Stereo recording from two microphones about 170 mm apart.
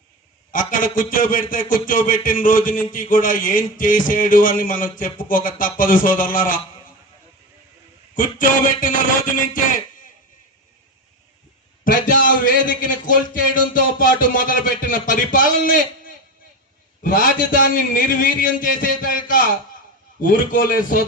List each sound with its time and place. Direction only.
0.5 s a man's voice: 50° left (ahead or behind)
8.1 s a man's voice: 55° left (ahead or behind)
11.8 s a man's voice: 50° left (ahead or behind)
17.0 s a man's voice: 55° left (ahead or behind)